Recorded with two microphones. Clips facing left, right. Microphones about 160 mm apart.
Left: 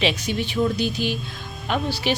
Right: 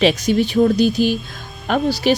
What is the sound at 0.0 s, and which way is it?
A woman's voice, 40° right (ahead or behind).